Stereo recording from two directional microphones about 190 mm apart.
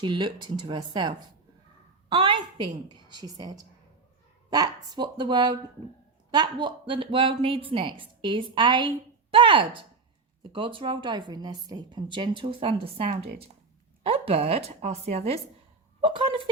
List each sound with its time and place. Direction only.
0.0 s a woman's voice: 25° right (ahead or behind)